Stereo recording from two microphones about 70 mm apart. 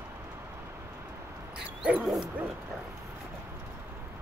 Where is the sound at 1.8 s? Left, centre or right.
Centre.